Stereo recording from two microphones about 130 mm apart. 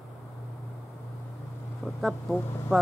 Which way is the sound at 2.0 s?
Centre (ahead or behind).